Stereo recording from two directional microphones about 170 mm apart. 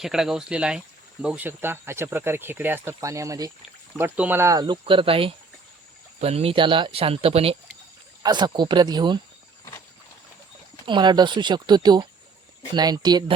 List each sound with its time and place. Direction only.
0.0 s speech: 5° right (ahead or behind); by 9.2 s 25° right (ahead or behind)
10.8 s speech: 25° right (ahead or behind)